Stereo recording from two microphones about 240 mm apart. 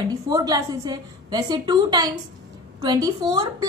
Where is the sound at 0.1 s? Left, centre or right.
Centre.